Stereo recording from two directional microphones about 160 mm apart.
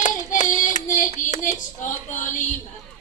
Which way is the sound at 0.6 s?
55° left (ahead or behind).